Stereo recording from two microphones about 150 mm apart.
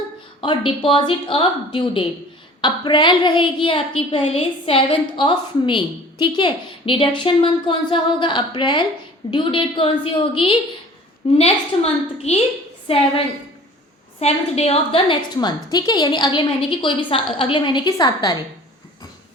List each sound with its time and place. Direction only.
0.4 s a woman's voice: 35° left (ahead or behind)
14.2 s a woman's voice: 45° left (ahead or behind); by 18.3 s 25° left (ahead or behind)